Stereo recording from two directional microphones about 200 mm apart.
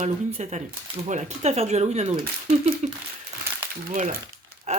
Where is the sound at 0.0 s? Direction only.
35° right (ahead or behind).